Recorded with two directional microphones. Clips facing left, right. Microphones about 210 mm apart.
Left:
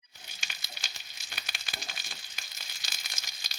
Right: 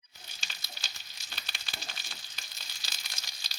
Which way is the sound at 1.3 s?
15° left (ahead or behind).